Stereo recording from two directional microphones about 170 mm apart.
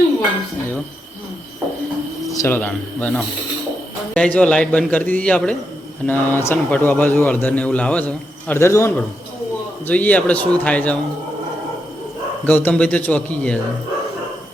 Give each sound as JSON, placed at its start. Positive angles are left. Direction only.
{"t": 2.3, "sound": "bird", "side_deg": 20}
{"t": 2.6, "sound": "a man's voice", "side_deg": 10}
{"t": 12.5, "sound": "speech", "side_deg": 10}